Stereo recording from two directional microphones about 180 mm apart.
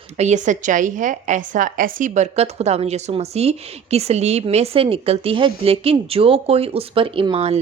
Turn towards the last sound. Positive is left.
turn(degrees=-30)  # may be behind; listen again after turning